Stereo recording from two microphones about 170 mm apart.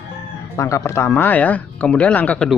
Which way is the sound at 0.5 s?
20° left (ahead or behind).